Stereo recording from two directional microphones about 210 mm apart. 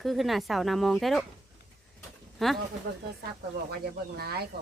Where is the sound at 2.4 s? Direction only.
Centre (ahead or behind).